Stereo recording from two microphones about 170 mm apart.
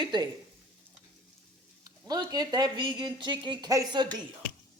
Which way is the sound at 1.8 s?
25° right (ahead or behind).